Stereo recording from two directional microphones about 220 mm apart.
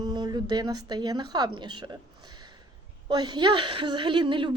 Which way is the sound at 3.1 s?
20° right (ahead or behind).